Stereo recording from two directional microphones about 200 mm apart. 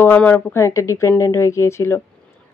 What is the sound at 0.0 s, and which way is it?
Speech, 10° left (ahead or behind).